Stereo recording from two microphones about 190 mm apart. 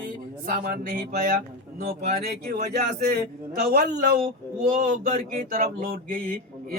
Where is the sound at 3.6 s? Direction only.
55° right (ahead or behind).